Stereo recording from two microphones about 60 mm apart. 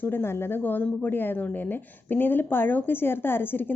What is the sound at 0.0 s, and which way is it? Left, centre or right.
Speech, left.